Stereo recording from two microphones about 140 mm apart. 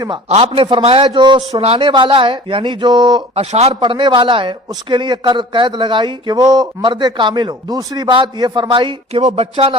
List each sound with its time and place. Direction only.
0.3 s a man's voice: 45° right (ahead or behind)
1.0 s a man's voice: 35° right (ahead or behind)
3.3 s a man's voice: 45° right (ahead or behind)
3.8 s a man's voice: 35° right (ahead or behind)